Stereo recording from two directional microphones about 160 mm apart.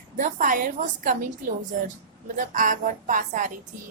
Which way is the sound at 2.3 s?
55° right (ahead or behind).